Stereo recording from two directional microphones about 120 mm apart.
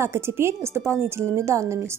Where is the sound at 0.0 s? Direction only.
20° right (ahead or behind).